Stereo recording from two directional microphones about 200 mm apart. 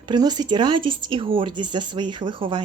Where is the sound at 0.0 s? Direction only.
20° right (ahead or behind).